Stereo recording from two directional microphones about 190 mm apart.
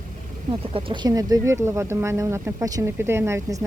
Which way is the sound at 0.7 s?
25° right (ahead or behind).